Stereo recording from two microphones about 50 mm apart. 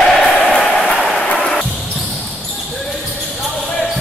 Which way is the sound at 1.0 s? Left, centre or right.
Left.